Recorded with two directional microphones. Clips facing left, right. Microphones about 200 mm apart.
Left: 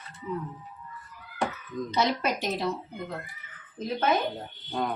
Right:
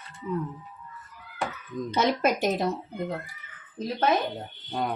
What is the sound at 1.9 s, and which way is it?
Speech, 50° right (ahead or behind).